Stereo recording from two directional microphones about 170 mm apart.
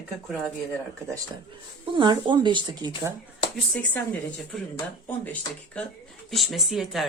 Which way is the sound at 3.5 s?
5° left (ahead or behind).